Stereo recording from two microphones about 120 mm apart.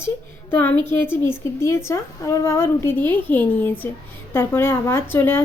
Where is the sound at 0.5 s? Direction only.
15° left (ahead or behind).